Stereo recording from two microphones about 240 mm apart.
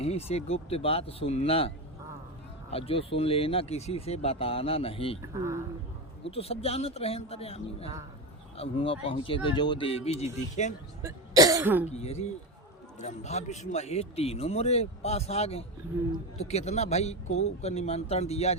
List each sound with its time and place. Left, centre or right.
0.0 s speech: left
6.3 s speech: left
11.0 s cough: centre
11.9 s speech: left